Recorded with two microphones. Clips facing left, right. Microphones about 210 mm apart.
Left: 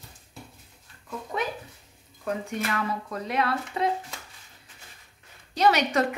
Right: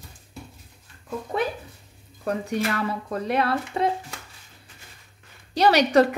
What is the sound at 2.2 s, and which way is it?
A woman's voice, 35° right (ahead or behind).